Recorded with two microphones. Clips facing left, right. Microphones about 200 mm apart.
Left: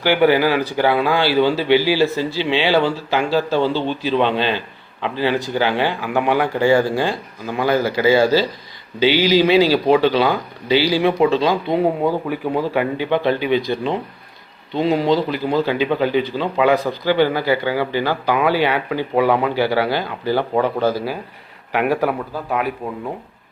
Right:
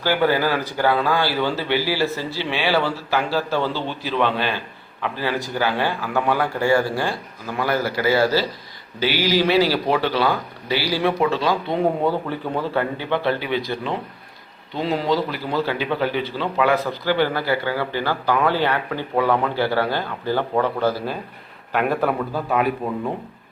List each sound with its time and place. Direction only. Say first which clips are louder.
0.0 s speech: left 5 dB; 15° left (ahead or behind)
22.8 s speech: right 2 dB; 15° right (ahead or behind)